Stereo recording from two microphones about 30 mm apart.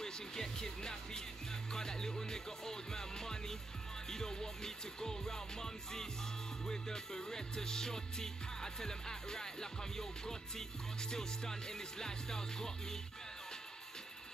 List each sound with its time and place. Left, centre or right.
0.0 s music: centre